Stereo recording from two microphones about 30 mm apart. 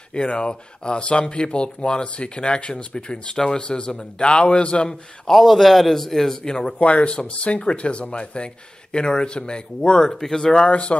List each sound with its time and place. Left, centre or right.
0.4 s speech: left
5.3 s a man's voice: centre
6.4 s speech: left
6.8 s speech: left
10.0 s speech: centre
10.6 s speech: left